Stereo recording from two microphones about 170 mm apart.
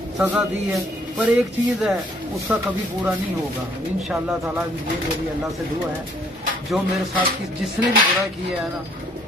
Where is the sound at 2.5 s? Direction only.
10° right (ahead or behind).